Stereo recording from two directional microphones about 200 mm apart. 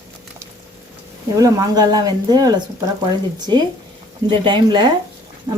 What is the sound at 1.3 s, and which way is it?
Speech, 15° right (ahead or behind).